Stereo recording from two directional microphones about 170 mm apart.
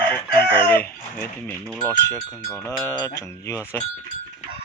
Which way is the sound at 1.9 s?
15° left (ahead or behind).